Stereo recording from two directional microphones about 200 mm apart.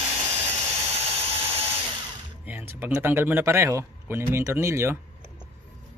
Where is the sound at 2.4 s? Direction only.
10° right (ahead or behind).